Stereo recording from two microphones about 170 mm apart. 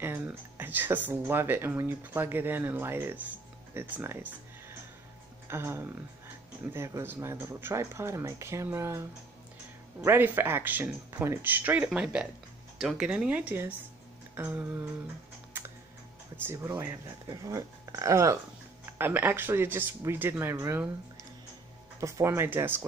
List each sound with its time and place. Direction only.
0.0 s speech: 15° right (ahead or behind)
10.0 s speech: 10° right (ahead or behind)
15.5 s computer keyboard: 10° right (ahead or behind)
16.4 s speech: 15° right (ahead or behind)
22.0 s speech: 15° right (ahead or behind)